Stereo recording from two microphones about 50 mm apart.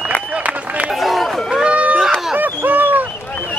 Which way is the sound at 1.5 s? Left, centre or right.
Right.